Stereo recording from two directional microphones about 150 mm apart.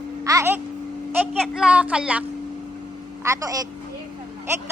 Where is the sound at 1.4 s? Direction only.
5° right (ahead or behind).